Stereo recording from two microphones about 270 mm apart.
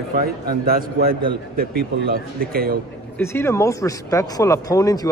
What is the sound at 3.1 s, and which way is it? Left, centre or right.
Speech, centre.